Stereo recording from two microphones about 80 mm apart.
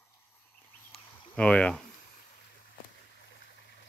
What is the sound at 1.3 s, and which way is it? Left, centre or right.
Speech, centre.